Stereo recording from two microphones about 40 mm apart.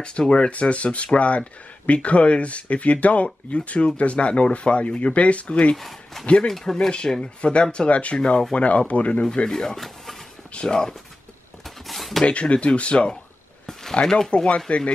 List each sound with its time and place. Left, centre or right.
0.3 s speech: left
5.8 s speech: centre
7.1 s speech: left
8.2 s speech: left
8.5 s speech: left
9.5 s speech: centre
10.5 s speech: left
11.6 s a sound: centre
12.3 s speech: left
14.0 s speech: centre
14.3 s speech: left